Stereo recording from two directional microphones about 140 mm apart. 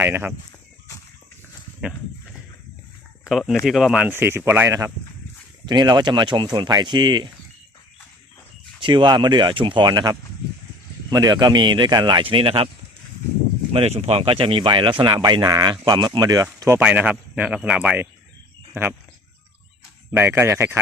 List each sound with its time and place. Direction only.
0.0 s a man's voice: 15° right (ahead or behind)
1.8 s speech: 5° right (ahead or behind)
3.2 s a man's voice: centre (ahead or behind); by 4.9 s 20° right (ahead or behind)
5.6 s speech: 30° right (ahead or behind)
8.8 s speech: 35° right (ahead or behind)
13.7 s speech: 50° right (ahead or behind); by 16.8 s 20° right (ahead or behind)
16.8 s a man's voice: 10° right (ahead or behind)
20.1 s a man's voice: 15° right (ahead or behind)